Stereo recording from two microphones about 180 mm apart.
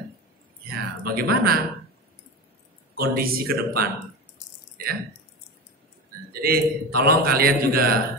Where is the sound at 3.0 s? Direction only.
55° right (ahead or behind).